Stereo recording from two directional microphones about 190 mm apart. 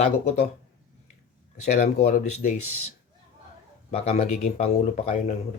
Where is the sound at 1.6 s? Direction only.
40° left (ahead or behind).